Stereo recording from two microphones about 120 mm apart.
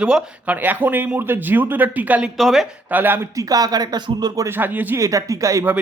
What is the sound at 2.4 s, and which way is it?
Speech, centre (ahead or behind).